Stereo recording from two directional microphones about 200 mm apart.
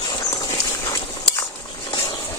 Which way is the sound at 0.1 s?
20° left (ahead or behind).